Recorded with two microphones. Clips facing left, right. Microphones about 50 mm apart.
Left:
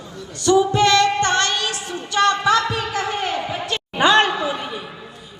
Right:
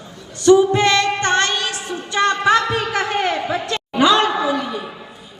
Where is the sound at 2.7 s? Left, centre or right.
Right.